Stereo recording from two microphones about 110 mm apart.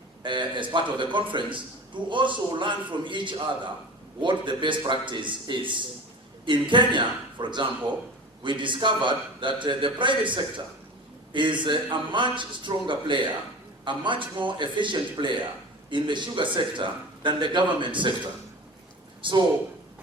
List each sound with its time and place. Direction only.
0.2 s a man's voice: 45° right (ahead or behind)
19.2 s a man's voice: 45° right (ahead or behind)